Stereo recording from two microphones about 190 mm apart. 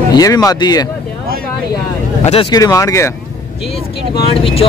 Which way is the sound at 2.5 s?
15° left (ahead or behind).